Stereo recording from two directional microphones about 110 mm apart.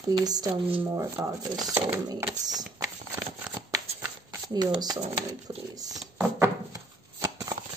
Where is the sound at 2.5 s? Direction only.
35° right (ahead or behind).